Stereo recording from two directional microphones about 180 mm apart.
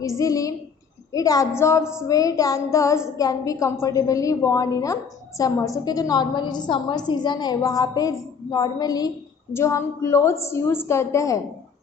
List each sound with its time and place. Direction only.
0.0 s a woman's voice: 20° left (ahead or behind)
1.8 s a woman's voice: 5° right (ahead or behind)
2.0 s a woman's voice: 20° left (ahead or behind)